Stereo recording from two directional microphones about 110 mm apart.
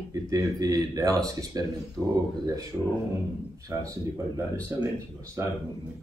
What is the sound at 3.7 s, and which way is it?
Speech, 30° right (ahead or behind).